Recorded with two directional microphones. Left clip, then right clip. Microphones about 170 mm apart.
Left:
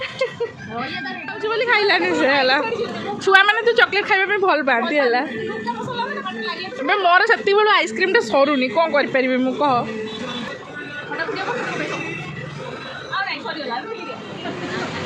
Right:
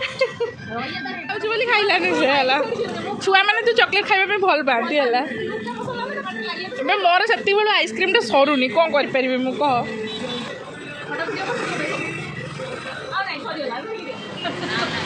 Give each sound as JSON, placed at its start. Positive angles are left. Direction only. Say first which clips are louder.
{"t": 1.3, "sound": "a woman's voice", "louder": "left 1 dB", "side_deg": 15}
{"t": 6.7, "sound": "a woman's voice", "louder": "left 2 dB", "side_deg": 20}